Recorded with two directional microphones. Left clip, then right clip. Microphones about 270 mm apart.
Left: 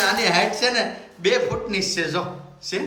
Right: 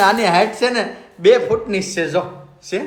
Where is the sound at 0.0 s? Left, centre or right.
Centre.